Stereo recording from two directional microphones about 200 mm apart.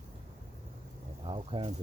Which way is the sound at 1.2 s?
25° right (ahead or behind).